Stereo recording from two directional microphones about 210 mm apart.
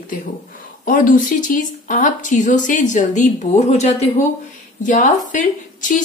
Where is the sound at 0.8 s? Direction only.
40° left (ahead or behind).